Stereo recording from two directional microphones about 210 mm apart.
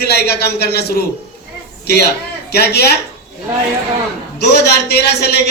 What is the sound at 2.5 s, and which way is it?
Speech, 50° left (ahead or behind).